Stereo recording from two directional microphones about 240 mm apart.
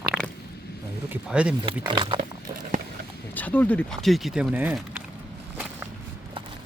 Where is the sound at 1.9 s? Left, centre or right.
Centre.